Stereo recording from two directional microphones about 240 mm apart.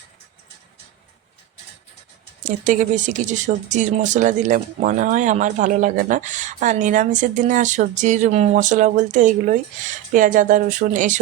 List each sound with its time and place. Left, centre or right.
2.4 s speech: right